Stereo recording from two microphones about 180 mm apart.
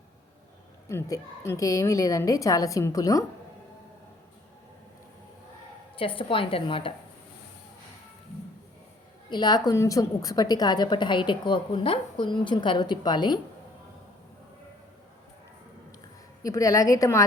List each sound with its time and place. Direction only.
0.9 s a woman's voice: 15° left (ahead or behind)
6.0 s a woman's voice: 30° left (ahead or behind)
9.3 s a woman's voice: 25° left (ahead or behind)
16.4 s a woman's voice: 20° left (ahead or behind)